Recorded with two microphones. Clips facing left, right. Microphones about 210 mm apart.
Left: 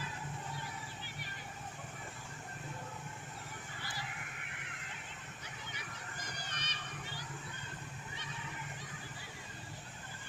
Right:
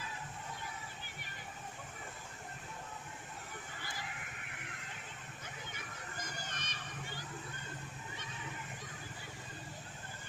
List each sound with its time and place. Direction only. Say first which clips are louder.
6.5 s crowd: even; 50° right (ahead or behind)